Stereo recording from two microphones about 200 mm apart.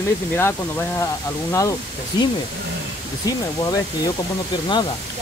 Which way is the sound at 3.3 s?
15° left (ahead or behind).